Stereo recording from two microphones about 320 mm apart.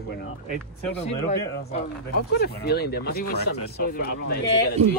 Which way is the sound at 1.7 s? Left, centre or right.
Left.